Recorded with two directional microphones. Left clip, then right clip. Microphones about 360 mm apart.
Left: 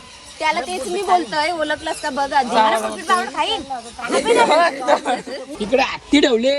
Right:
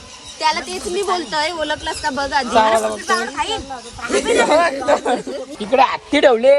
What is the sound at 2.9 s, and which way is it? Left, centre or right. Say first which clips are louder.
Speech: left 1 dB; centre.